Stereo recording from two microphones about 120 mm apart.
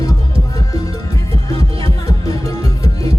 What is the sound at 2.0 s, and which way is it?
Music, 30° left (ahead or behind).